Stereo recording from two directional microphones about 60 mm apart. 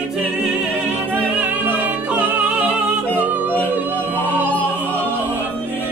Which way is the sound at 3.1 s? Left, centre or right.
Right.